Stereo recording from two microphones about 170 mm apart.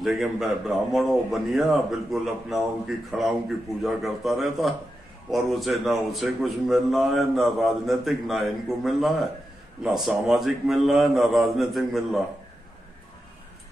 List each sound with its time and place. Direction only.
0.0 s a man's voice: centre (ahead or behind)